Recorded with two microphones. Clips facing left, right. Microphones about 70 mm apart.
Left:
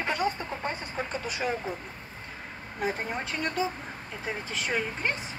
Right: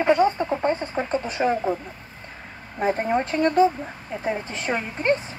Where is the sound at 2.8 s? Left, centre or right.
Right.